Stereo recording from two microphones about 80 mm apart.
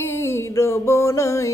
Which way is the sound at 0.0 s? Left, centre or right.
Left.